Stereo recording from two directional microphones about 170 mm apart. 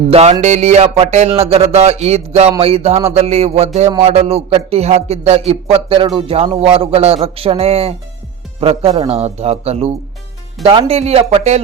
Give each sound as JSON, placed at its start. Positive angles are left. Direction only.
{"t": 0.1, "sound": "a man's voice", "side_deg": -40}
{"t": 9.0, "sound": "a man's voice", "side_deg": -40}